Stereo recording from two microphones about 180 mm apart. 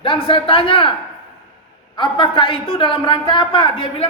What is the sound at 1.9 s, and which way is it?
A man's voice, 25° left (ahead or behind).